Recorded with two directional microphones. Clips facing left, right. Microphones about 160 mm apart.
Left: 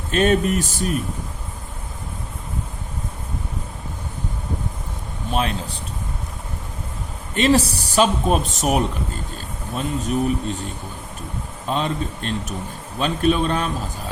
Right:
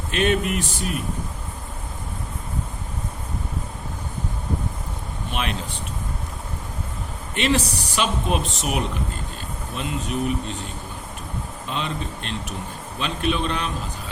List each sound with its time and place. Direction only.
0.1 s speech: 40° left (ahead or behind)
5.3 s speech: 35° left (ahead or behind)
7.3 s speech: 40° left (ahead or behind)
11.7 s a man's voice: 40° left (ahead or behind)